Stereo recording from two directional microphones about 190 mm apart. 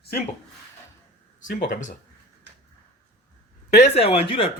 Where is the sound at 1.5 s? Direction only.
40° left (ahead or behind).